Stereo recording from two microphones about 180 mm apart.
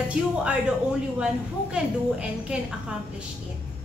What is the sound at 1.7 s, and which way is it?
A woman's voice, 5° right (ahead or behind).